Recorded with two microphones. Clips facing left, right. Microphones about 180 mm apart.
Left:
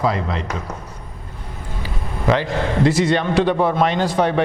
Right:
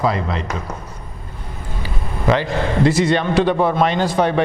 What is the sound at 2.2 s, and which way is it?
A man's voice, 15° right (ahead or behind).